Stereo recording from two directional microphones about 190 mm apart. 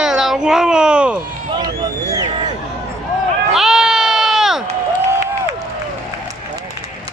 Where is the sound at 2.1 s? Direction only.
25° right (ahead or behind).